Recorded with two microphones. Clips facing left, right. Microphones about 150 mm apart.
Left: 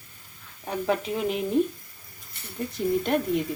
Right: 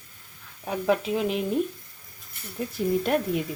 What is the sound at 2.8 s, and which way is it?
Speech, 5° right (ahead or behind).